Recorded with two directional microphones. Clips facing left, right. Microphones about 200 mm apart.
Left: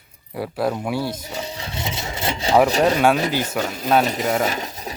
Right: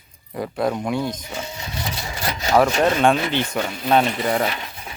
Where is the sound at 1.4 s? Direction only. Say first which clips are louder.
Left 1 dB; 30° left (ahead or behind).